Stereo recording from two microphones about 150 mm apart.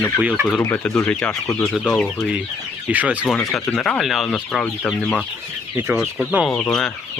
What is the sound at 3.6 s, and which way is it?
Speech, 10° left (ahead or behind).